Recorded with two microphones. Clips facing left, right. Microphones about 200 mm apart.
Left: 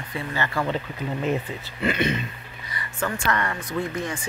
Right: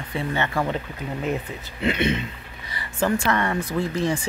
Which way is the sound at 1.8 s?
20° right (ahead or behind).